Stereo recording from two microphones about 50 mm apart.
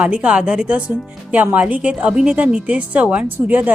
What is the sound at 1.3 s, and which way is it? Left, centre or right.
A woman's voice, right.